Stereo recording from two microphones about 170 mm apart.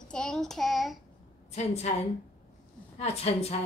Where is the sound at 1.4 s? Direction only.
40° left (ahead or behind).